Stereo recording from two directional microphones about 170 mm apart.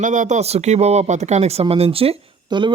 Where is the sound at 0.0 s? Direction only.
45° right (ahead or behind).